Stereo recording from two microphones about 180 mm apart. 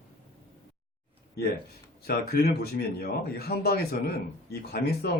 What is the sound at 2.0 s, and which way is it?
A man's voice, 60° left (ahead or behind).